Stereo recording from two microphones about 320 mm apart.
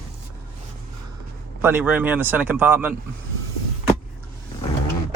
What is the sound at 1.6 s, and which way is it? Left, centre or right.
Speech, centre.